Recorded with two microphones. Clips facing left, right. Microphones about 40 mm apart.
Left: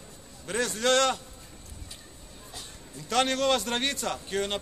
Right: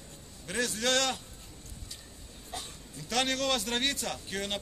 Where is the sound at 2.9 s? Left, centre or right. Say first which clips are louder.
Left 4 dB; centre.